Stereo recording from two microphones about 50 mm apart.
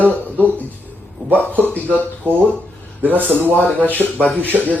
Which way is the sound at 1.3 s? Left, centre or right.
Left.